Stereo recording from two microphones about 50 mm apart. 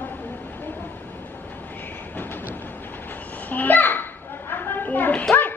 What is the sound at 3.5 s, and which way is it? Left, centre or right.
Children playing, left.